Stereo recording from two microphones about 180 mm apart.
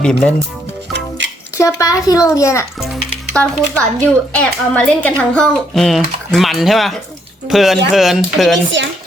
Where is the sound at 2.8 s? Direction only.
Centre (ahead or behind).